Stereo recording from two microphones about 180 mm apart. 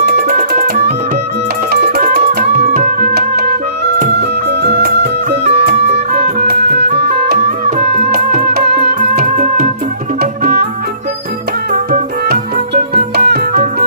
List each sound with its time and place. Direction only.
0.0 s music: 55° right (ahead or behind)
9.0 s music: 45° right (ahead or behind)
10.2 s music: 60° right (ahead or behind)
11.7 s music: 55° right (ahead or behind)